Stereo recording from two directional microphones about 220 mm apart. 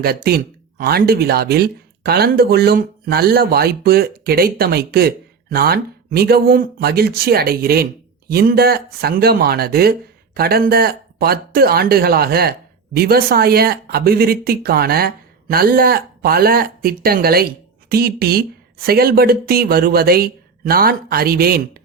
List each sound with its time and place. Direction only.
0.0 s speech: 45° right (ahead or behind)